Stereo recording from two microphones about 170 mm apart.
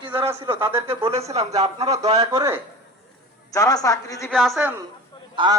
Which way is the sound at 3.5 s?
20° left (ahead or behind).